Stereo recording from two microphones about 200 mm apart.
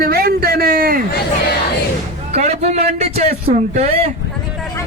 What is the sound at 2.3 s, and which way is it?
A man's voice, 30° right (ahead or behind).